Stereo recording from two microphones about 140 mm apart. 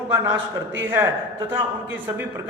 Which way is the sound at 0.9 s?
15° right (ahead or behind).